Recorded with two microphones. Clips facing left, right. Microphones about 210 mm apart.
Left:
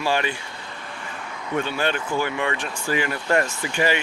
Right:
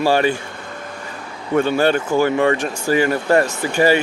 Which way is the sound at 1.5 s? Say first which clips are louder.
Right 9 dB; 45° right (ahead or behind).